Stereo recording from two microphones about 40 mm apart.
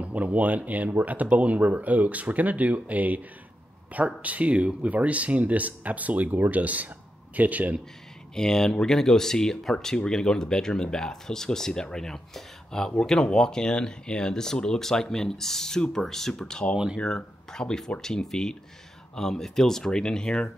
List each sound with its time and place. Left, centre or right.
0.0 s speech: right
8.4 s speech: centre